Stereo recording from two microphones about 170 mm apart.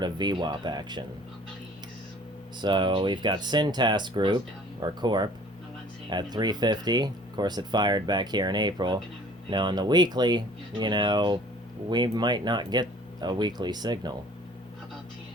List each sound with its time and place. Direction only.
0.0 s speech: 25° right (ahead or behind)
2.6 s speech: 25° right (ahead or behind)